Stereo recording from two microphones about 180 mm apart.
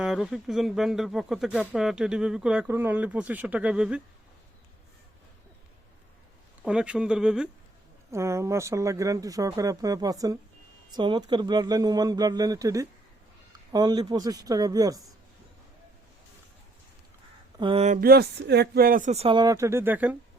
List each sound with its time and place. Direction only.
0.0 s speech: 5° right (ahead or behind)
6.6 s speech: 5° right (ahead or behind)
8.1 s speech: 15° right (ahead or behind)
17.6 s speech: 30° right (ahead or behind)
18.0 s speech: 60° right (ahead or behind); by 20.1 s 10° right (ahead or behind)